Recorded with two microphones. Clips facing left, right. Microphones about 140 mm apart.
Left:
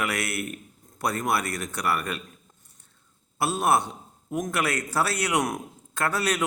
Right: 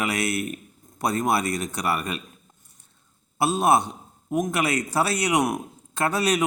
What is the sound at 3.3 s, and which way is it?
A man's voice, 20° right (ahead or behind).